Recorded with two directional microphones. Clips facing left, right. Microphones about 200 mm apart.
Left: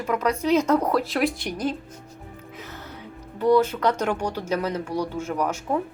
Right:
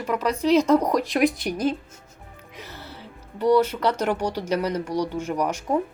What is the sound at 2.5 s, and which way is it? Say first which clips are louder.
Music: right 1 dB; 10° right (ahead or behind).